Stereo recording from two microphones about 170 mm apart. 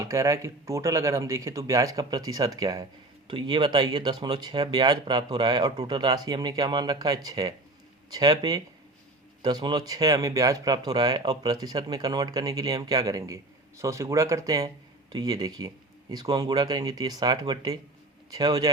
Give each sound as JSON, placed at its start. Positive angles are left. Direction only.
{"t": 0.0, "sound": "speech", "side_deg": -20}